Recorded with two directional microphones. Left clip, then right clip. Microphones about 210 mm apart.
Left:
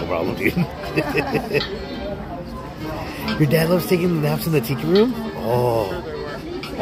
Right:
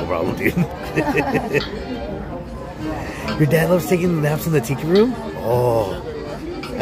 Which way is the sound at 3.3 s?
Centre (ahead or behind).